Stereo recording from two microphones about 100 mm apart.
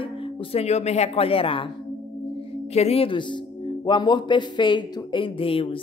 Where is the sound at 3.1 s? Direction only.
55° left (ahead or behind).